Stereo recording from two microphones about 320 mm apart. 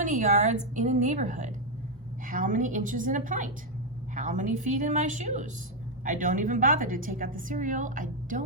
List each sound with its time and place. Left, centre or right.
0.0 s a woman's voice: right